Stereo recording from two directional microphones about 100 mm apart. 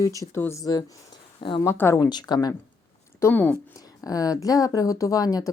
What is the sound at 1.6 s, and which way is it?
Speech, 25° left (ahead or behind).